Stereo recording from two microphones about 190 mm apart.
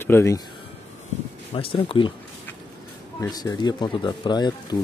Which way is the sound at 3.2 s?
20° left (ahead or behind).